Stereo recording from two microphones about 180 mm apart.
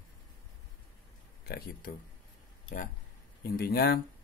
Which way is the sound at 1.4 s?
55° left (ahead or behind).